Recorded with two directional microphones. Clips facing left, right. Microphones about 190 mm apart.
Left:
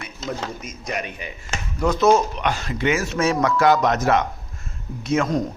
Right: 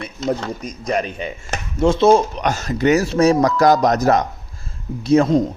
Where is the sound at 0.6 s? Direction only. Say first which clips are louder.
Right 7 dB; 35° right (ahead or behind).